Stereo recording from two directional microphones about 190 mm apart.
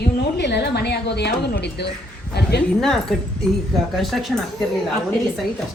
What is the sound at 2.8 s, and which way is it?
A woman's voice, centre (ahead or behind).